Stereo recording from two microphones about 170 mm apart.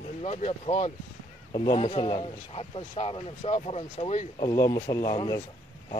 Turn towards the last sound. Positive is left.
turn(degrees=25)  # may be behind; listen again after turning